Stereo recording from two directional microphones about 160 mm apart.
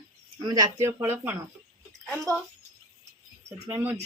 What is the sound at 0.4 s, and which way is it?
Speech, 20° right (ahead or behind).